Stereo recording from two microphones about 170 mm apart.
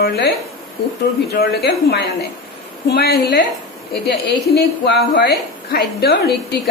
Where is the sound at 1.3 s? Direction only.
70° left (ahead or behind).